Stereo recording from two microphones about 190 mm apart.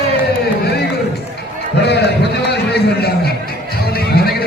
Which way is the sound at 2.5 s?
60° left (ahead or behind).